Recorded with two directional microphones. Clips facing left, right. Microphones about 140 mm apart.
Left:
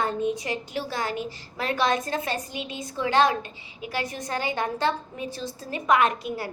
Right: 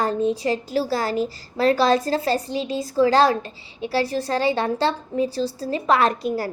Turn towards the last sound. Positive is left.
turn(degrees=-40)  # may be behind; listen again after turning